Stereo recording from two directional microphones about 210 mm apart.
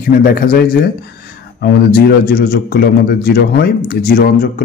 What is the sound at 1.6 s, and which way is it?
Speech, 50° left (ahead or behind).